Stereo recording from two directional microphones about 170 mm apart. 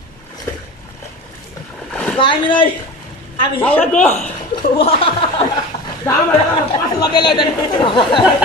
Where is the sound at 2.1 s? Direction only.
30° left (ahead or behind).